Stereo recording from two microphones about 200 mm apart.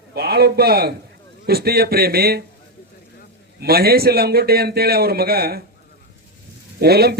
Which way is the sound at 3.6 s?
50° right (ahead or behind).